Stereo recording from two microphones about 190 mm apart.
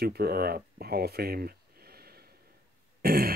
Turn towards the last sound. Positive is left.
turn(degrees=-50)  # may be behind; listen again after turning